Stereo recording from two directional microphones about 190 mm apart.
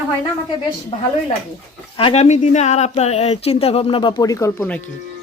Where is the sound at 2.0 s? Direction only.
30° left (ahead or behind); by 4.8 s 10° left (ahead or behind).